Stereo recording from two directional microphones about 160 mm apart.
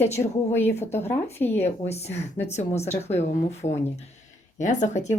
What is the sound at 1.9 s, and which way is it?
Speech, 40° left (ahead or behind).